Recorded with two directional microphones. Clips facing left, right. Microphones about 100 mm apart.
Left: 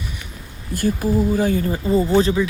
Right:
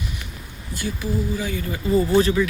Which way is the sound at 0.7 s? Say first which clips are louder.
Left 7 dB; 45° left (ahead or behind).